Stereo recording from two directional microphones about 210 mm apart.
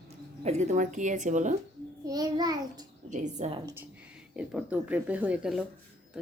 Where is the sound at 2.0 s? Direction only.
20° right (ahead or behind).